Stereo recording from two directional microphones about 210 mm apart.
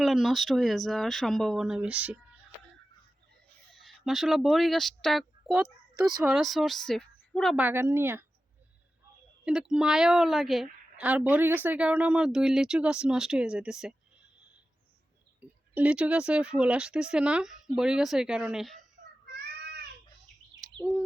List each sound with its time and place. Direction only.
0.0 s a woman's voice: centre (ahead or behind)
3.8 s a woman's voice: centre (ahead or behind)
9.4 s a woman's voice: centre (ahead or behind)
15.4 s a woman's voice: 5° right (ahead or behind)
19.3 s child singing: 50° right (ahead or behind)
20.6 s bird: 15° right (ahead or behind)